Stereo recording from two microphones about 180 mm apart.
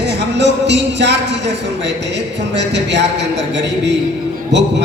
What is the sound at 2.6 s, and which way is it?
Speech, 75° right (ahead or behind).